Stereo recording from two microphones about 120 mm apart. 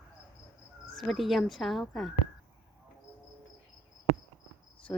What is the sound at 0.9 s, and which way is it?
Speech, centre (ahead or behind).